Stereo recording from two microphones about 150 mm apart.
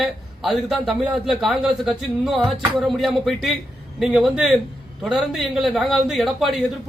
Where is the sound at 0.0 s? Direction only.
Centre (ahead or behind).